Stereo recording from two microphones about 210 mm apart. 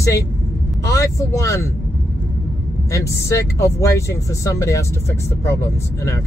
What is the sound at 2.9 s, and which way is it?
Speech, 15° left (ahead or behind).